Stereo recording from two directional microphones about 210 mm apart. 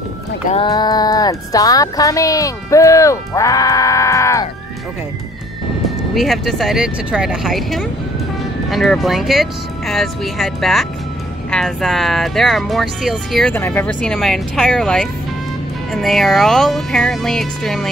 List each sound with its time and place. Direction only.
0.7 s speech: 20° left (ahead or behind)
5.9 s speech: centre (ahead or behind)